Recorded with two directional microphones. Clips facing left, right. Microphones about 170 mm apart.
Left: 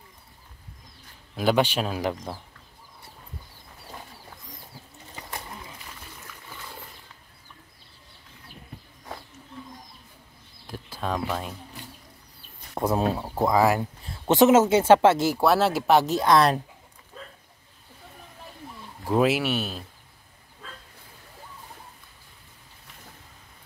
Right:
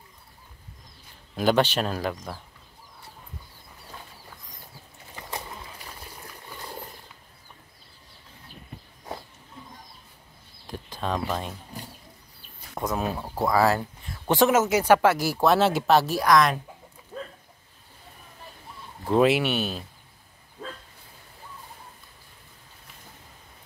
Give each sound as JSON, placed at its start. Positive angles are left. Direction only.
{"t": 1.3, "sound": "speech", "side_deg": 5}
{"t": 2.0, "sound": "speech", "side_deg": 20}
{"t": 5.9, "sound": "a sound", "side_deg": -35}
{"t": 10.7, "sound": "a sound", "side_deg": 10}
{"t": 12.7, "sound": "speech", "side_deg": 30}
{"t": 13.2, "sound": "speech", "side_deg": 20}
{"t": 15.4, "sound": "speech", "side_deg": 5}
{"t": 15.9, "sound": "speech", "side_deg": 20}
{"t": 19.0, "sound": "speech", "side_deg": 5}